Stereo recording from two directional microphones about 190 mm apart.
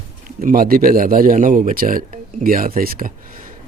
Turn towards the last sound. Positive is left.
turn(degrees=-50)  # may be behind; listen again after turning